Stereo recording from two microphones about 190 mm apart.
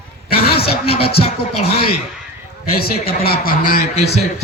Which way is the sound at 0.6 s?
30° left (ahead or behind).